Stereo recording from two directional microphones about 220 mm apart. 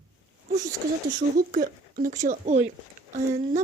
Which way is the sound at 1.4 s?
40° right (ahead or behind).